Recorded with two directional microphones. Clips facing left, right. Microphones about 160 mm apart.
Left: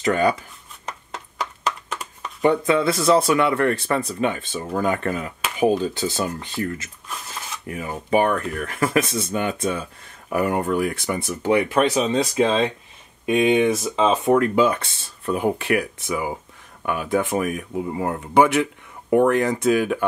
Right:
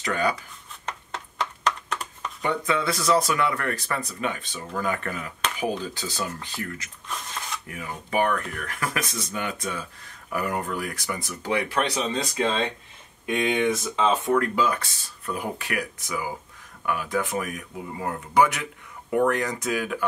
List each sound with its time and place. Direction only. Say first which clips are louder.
0.0 s speech: left 6 dB; 25° left (ahead or behind)
0.8 s a sound: left 1 dB; 10° left (ahead or behind)
2.4 s speech: left 7 dB; 25° left (ahead or behind)